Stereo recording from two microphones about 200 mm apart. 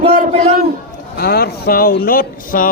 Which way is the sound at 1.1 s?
55° left (ahead or behind).